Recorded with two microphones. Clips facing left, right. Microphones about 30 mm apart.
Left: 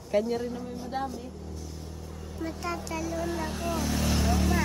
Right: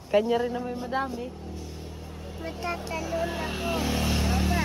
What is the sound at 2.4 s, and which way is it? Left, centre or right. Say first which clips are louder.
Speech: right 1 dB; right.